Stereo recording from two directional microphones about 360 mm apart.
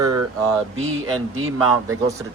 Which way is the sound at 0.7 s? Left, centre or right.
Right.